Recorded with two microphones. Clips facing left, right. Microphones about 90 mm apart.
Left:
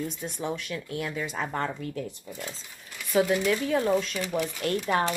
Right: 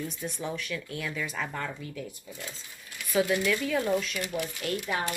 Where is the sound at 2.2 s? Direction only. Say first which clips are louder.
Left 4 dB; 60° left (ahead or behind).